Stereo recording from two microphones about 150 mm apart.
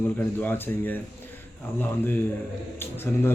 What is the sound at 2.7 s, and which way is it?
Speech, 15° left (ahead or behind).